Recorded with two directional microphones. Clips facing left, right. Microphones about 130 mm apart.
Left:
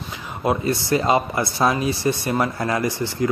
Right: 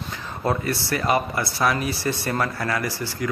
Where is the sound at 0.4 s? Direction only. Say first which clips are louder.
Left 3 dB; 15° left (ahead or behind).